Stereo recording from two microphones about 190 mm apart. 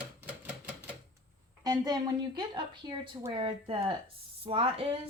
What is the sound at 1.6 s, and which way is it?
A woman's voice, 20° right (ahead or behind).